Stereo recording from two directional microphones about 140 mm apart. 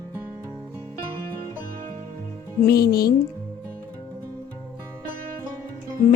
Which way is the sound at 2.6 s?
90° left.